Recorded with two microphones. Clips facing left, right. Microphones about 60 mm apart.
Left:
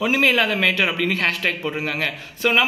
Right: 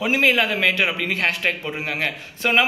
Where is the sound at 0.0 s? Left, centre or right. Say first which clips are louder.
Left 1 dB; centre.